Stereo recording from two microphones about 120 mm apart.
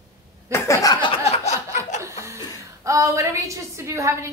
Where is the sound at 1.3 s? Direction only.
65° left (ahead or behind).